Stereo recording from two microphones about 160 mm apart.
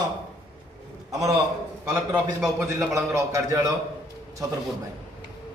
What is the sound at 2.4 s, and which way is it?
A man's voice, 20° right (ahead or behind).